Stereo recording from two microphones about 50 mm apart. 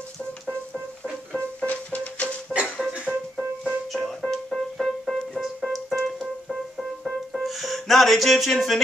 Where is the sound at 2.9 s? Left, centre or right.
Right.